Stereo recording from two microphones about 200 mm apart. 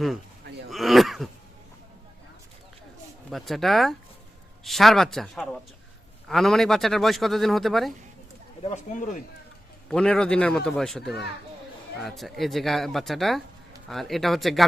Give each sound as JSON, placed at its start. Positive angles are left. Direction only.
{"t": 0.7, "sound": "throat clearing", "side_deg": 0}
{"t": 3.2, "sound": "a man's voice", "side_deg": 0}
{"t": 8.6, "sound": "speech", "side_deg": 35}
{"t": 9.9, "sound": "a man's voice", "side_deg": 5}